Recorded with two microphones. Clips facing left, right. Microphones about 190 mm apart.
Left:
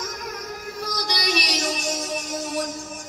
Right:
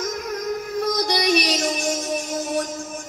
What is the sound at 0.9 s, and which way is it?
Music, 55° right (ahead or behind).